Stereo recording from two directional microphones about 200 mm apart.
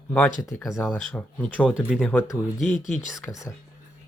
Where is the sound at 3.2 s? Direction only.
15° left (ahead or behind).